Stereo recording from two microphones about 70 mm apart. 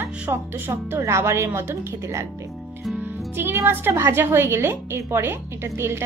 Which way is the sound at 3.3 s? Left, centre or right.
Right.